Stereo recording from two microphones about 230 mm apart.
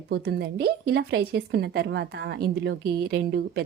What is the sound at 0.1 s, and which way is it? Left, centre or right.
Speech, right.